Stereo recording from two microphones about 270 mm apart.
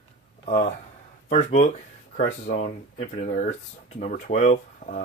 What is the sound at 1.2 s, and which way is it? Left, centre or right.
Speech, left.